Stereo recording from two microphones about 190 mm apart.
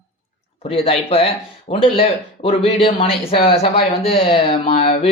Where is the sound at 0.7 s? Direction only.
30° left (ahead or behind).